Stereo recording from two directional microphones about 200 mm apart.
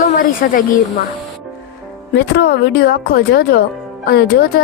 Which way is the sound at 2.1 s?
60° left (ahead or behind).